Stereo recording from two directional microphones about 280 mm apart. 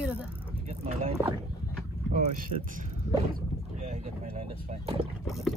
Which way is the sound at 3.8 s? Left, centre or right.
Right.